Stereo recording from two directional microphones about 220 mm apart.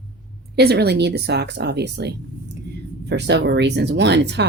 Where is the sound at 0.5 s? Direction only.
45° right (ahead or behind).